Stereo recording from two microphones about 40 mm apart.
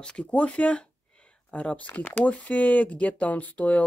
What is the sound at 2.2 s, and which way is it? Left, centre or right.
Speech, left.